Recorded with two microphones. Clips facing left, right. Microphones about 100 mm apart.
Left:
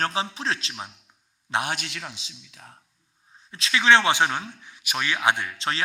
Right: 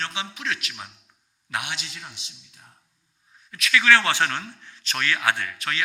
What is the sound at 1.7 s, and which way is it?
Speech, 55° left (ahead or behind).